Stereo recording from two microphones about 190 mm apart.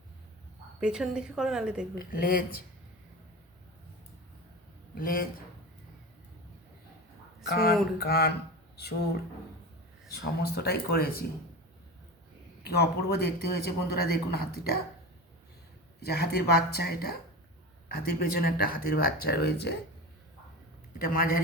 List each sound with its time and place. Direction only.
0.8 s speech: 5° right (ahead or behind)
2.0 s speech: 50° left (ahead or behind)
4.9 s speech: 50° left (ahead or behind)
7.4 s speech: 55° left (ahead or behind)
10.1 s speech: 60° left (ahead or behind)
12.6 s speech: 55° left (ahead or behind)
16.0 s speech: 55° left (ahead or behind)
21.0 s speech: 50° left (ahead or behind)